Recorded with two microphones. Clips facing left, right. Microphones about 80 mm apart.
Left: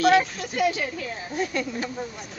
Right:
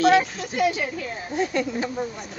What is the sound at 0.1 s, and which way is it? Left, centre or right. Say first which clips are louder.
Speech: right 1 dB; centre.